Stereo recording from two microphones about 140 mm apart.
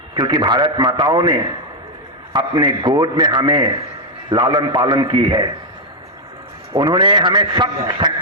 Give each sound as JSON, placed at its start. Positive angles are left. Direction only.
{"t": 0.2, "sound": "a man's voice", "side_deg": -30}
{"t": 6.7, "sound": "a man's voice", "side_deg": -30}